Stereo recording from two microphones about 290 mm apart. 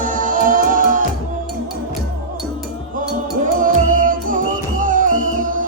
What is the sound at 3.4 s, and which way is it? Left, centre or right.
Music, right.